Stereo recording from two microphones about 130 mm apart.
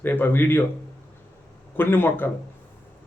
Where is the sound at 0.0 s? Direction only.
15° left (ahead or behind).